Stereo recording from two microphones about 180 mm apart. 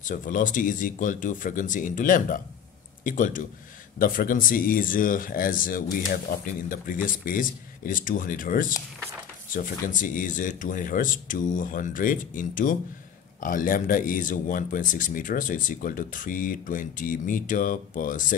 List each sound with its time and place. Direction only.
0.0 s speech: 45° left (ahead or behind)